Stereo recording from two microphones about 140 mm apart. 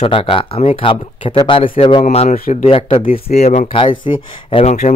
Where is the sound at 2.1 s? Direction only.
55° left (ahead or behind).